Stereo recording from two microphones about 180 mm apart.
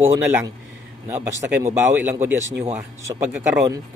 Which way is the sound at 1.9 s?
10° right (ahead or behind).